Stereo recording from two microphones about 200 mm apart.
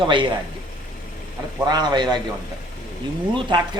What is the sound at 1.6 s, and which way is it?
Speech, 20° right (ahead or behind).